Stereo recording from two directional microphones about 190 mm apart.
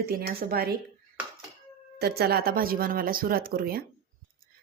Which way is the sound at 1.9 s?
55° right (ahead or behind).